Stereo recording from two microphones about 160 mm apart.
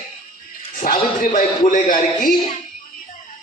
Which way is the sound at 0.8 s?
60° left (ahead or behind).